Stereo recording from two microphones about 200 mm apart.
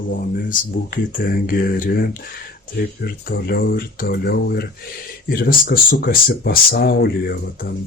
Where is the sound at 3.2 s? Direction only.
50° left (ahead or behind).